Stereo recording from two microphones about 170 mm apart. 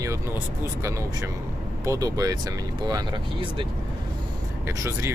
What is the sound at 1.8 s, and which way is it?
Speech, 20° right (ahead or behind).